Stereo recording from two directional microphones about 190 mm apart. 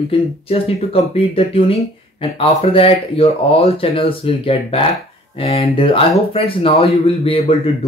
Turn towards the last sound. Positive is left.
turn(degrees=30)  # may be behind; listen again after turning